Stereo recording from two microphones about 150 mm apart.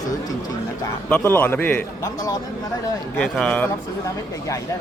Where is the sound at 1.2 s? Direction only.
15° left (ahead or behind).